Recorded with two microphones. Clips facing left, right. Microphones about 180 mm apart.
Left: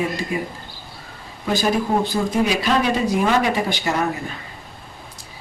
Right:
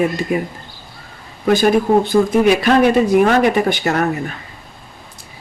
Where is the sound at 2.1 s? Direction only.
60° right (ahead or behind).